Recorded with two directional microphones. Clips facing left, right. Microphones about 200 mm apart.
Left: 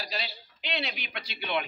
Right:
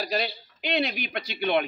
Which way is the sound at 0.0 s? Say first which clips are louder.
Right 9 dB; 50° right (ahead or behind).